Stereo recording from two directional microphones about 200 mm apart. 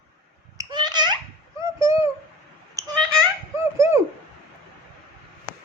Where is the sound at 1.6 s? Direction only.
15° right (ahead or behind).